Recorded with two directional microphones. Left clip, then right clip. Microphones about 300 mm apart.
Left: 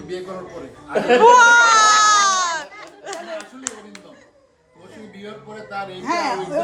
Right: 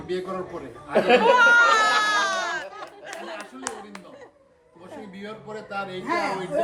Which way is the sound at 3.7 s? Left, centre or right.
Centre.